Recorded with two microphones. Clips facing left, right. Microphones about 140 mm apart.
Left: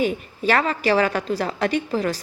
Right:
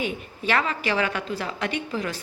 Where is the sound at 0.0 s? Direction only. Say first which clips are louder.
Left 7 dB; 40° left (ahead or behind).